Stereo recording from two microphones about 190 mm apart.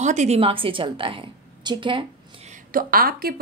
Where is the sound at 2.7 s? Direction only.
50° right (ahead or behind).